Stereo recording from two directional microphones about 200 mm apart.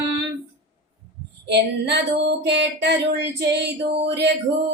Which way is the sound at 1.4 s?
55° right (ahead or behind).